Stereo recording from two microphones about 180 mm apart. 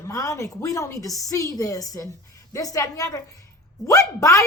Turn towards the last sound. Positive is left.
turn(degrees=15)  # may be behind; listen again after turning